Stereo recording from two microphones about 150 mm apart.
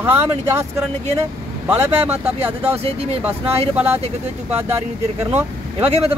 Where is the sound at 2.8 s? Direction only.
45° right (ahead or behind).